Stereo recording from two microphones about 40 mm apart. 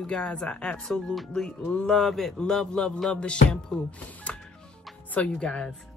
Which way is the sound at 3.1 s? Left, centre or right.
Left.